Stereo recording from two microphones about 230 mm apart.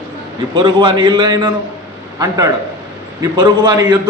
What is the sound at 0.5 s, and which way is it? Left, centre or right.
A man's voice, right.